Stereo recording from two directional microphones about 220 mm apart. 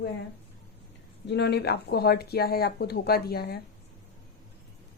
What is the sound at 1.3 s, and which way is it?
A woman's voice, 50° left (ahead or behind).